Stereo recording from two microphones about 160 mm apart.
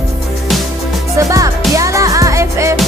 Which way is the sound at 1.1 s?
20° right (ahead or behind).